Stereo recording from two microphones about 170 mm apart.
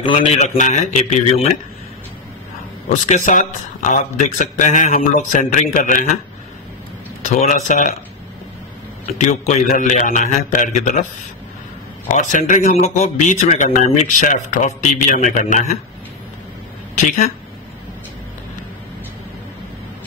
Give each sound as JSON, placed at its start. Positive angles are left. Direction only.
{"t": 0.4, "sound": "speech", "side_deg": 45}
{"t": 2.9, "sound": "speech", "side_deg": 50}
{"t": 7.2, "sound": "speech", "side_deg": 45}
{"t": 9.0, "sound": "speech", "side_deg": 45}
{"t": 12.1, "sound": "speech", "side_deg": 45}
{"t": 16.9, "sound": "speech", "side_deg": 45}